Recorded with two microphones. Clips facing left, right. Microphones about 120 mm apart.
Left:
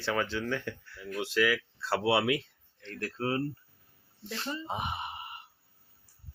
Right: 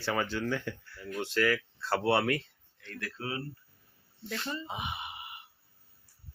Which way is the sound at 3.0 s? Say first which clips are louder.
Left 6 dB; 40° left (ahead or behind).